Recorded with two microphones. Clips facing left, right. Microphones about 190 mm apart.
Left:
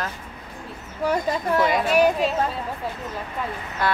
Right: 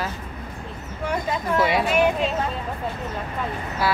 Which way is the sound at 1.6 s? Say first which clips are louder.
Right 1 dB; 5° right (ahead or behind).